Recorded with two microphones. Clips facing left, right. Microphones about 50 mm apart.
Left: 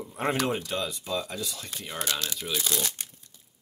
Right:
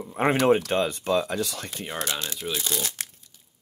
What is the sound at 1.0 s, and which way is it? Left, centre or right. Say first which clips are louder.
Speech: right 7 dB; right.